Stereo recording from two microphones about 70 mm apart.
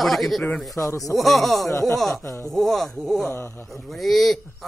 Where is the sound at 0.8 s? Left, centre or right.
Left.